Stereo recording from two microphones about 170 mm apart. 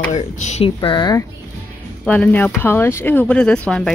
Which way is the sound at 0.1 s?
45° left (ahead or behind).